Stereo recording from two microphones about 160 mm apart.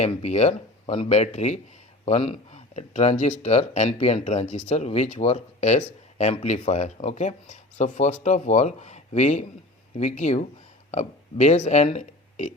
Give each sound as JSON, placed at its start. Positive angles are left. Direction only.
{"t": 0.2, "sound": "speech", "side_deg": 45}